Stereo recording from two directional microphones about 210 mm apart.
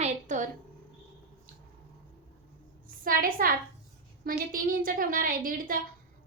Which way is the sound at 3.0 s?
40° right (ahead or behind).